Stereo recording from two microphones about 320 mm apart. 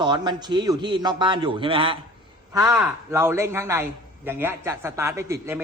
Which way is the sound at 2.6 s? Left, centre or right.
Centre.